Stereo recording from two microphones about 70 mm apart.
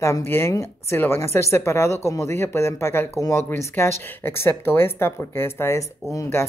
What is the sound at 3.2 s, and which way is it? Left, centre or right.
Speech, left.